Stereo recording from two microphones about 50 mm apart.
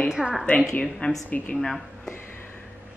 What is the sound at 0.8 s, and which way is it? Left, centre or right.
Speech, centre.